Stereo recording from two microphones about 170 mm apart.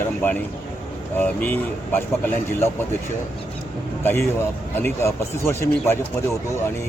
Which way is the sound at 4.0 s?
15° left (ahead or behind).